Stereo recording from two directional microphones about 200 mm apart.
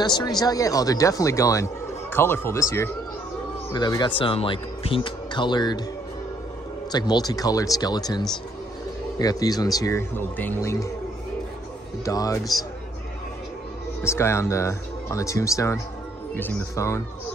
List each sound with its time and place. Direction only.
0.0 s speech: 20° left (ahead or behind)
6.9 s speech: 20° left (ahead or behind)
12.0 s speech: 15° left (ahead or behind)
14.0 s speech: 15° left (ahead or behind)